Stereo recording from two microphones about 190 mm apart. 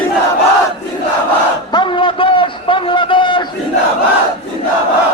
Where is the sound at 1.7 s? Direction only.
25° left (ahead or behind).